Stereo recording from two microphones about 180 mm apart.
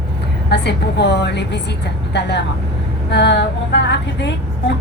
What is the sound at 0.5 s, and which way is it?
A woman's voice, 70° left (ahead or behind).